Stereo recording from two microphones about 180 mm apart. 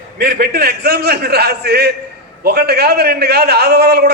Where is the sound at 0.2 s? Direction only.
60° right (ahead or behind).